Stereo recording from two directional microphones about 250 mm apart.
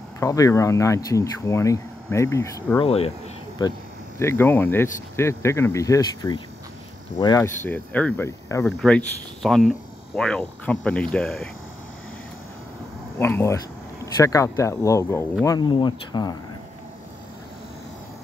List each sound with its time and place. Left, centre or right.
0.2 s speech: centre
13.2 s speech: centre